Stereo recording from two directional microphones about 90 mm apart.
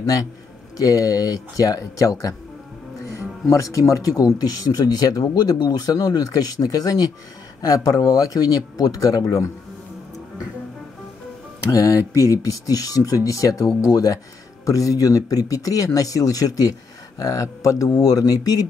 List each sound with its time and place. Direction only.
0.7 s speech: 45° left (ahead or behind)
11.7 s speech: 40° left (ahead or behind)